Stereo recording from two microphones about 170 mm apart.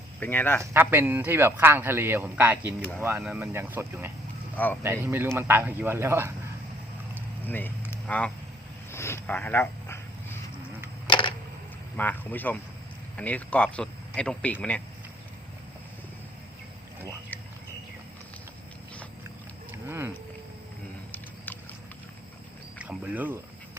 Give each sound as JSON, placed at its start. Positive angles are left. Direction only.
{"t": 0.2, "sound": "speech", "side_deg": 10}
{"t": 0.6, "sound": "a man's voice", "side_deg": -15}
{"t": 4.5, "sound": "speech", "side_deg": 10}
{"t": 4.8, "sound": "a man's voice", "side_deg": -15}
{"t": 7.4, "sound": "speech", "side_deg": 10}
{"t": 8.9, "sound": "a sound", "side_deg": 15}
{"t": 11.0, "sound": "camera", "side_deg": 30}
{"t": 11.9, "sound": "speech", "side_deg": 10}
{"t": 19.9, "sound": "a man's voice", "side_deg": -15}
{"t": 21.1, "sound": "a sound", "side_deg": 10}
{"t": 22.8, "sound": "speech", "side_deg": -5}